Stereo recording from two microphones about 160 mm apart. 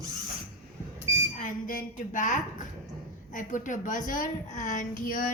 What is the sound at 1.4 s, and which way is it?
A woman's voice, 55° left (ahead or behind).